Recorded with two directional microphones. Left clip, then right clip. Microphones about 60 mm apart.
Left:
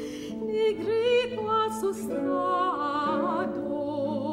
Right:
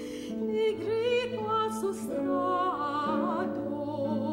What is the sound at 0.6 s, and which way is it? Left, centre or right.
Music, right.